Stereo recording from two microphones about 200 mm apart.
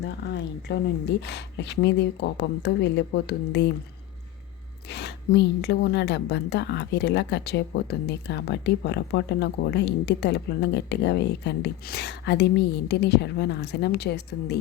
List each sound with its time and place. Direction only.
0.7 s a woman's voice: 55° left (ahead or behind)
4.9 s a woman's voice: 55° left (ahead or behind)